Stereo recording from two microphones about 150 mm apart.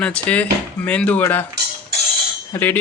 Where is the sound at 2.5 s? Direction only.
15° left (ahead or behind).